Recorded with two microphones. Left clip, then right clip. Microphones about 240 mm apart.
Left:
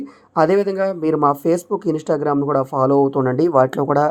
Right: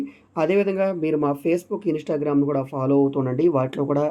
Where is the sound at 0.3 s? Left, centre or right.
Left.